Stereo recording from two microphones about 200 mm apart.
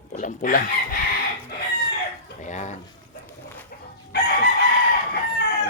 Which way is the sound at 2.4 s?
35° left (ahead or behind).